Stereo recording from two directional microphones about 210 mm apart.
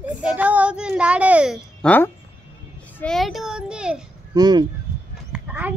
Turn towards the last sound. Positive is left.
turn(degrees=-5)  # may be behind; listen again after turning